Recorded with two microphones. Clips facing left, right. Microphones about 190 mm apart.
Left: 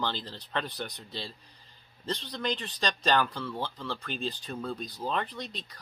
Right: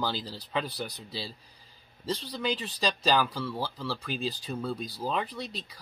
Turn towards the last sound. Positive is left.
turn(degrees=-5)  # may be behind; listen again after turning